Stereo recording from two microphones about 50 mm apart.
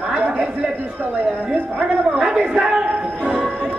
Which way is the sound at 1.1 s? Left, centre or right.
Right.